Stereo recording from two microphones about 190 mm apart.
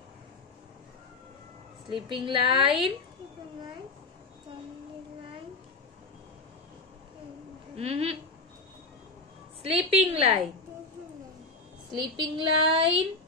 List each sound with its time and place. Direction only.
1.9 s a woman's voice: 25° right (ahead or behind)
7.7 s a woman's voice: 30° right (ahead or behind)
9.6 s a woman's voice: 30° right (ahead or behind)
11.9 s a woman's voice: 25° right (ahead or behind)